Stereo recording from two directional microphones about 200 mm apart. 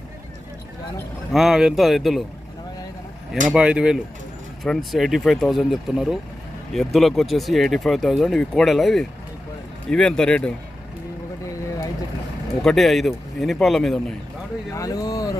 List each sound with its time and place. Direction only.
1.3 s speech: centre (ahead or behind)
3.4 s speech: 5° right (ahead or behind)
12.6 s speech: centre (ahead or behind)
14.7 s speech: 15° left (ahead or behind)